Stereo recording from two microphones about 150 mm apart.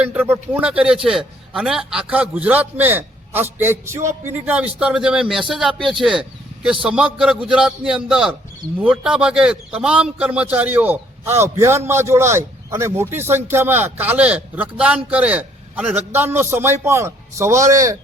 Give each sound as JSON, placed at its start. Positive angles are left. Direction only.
{"t": 0.0, "sound": "a man's voice", "side_deg": -10}